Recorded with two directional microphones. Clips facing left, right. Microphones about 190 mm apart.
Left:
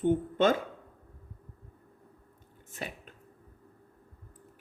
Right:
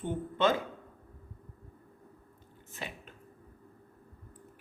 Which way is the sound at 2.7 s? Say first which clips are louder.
Left 2 dB; 40° left (ahead or behind).